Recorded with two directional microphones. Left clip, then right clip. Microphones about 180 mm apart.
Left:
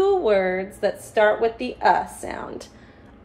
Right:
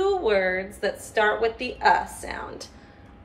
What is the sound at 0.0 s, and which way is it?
A woman's voice, 40° left (ahead or behind).